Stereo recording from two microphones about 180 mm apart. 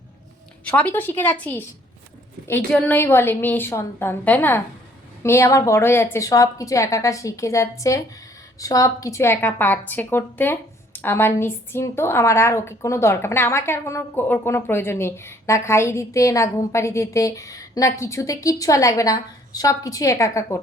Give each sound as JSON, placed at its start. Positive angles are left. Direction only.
{"t": 0.6, "sound": "a woman's voice", "side_deg": 10}